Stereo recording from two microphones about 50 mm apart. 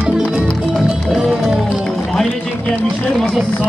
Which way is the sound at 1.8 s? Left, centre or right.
Centre.